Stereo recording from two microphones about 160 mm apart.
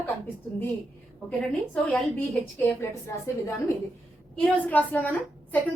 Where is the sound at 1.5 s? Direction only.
10° left (ahead or behind).